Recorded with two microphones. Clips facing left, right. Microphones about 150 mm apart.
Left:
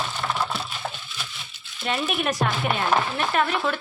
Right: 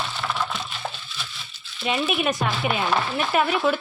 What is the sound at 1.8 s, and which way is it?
Speech, 5° right (ahead or behind).